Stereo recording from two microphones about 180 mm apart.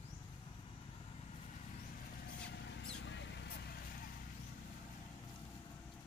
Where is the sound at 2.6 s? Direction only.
90° left.